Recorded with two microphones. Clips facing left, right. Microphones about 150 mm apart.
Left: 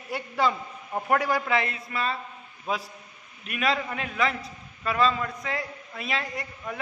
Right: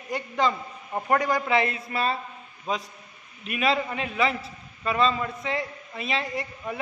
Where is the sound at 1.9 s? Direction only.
30° right (ahead or behind).